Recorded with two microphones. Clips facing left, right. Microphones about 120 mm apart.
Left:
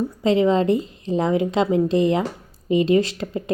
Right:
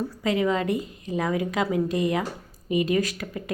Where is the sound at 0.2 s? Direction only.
25° left (ahead or behind).